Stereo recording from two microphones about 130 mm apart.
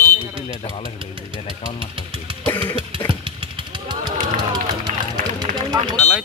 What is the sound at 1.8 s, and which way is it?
Engine, 40° right (ahead or behind).